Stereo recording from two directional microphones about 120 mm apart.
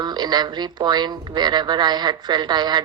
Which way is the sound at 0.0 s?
35° right (ahead or behind).